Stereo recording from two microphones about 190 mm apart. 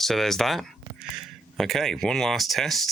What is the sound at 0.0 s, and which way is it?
Speech, centre (ahead or behind).